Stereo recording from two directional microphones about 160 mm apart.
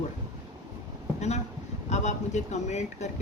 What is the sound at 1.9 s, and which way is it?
Speech, 45° left (ahead or behind).